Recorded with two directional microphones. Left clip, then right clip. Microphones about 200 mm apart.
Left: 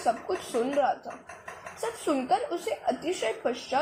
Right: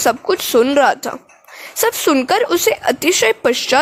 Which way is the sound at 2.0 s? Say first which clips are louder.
Right 11 dB; 55° right (ahead or behind).